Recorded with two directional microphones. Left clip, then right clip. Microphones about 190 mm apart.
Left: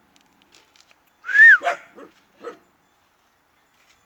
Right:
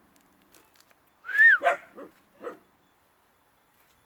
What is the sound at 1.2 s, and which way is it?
Whistling, 10° left (ahead or behind).